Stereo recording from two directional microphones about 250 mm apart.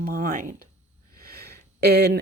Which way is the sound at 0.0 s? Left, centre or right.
Right.